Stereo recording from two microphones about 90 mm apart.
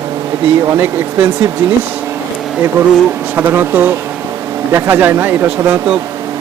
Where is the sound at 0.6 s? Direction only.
25° right (ahead or behind).